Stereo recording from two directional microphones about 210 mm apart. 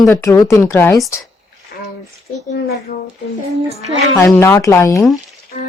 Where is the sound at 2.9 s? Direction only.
40° left (ahead or behind).